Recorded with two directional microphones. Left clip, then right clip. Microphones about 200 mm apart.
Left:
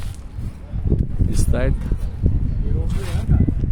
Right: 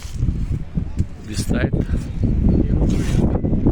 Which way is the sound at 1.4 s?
10° left (ahead or behind).